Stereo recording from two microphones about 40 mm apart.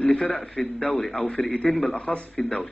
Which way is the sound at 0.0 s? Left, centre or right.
Left.